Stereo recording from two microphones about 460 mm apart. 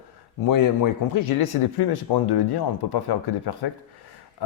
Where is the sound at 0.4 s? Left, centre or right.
Left.